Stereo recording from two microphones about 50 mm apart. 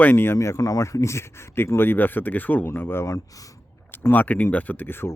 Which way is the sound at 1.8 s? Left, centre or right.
Left.